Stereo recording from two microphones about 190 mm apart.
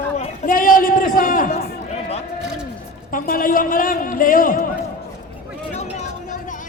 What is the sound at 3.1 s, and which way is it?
A man's voice, 45° left (ahead or behind).